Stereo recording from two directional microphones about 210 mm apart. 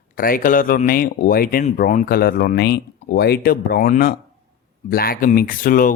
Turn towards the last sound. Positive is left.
turn(degrees=40)  # may be behind; listen again after turning